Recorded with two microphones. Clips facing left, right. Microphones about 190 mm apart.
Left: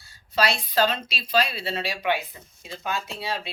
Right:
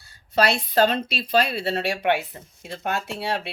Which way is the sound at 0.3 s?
55° right (ahead or behind).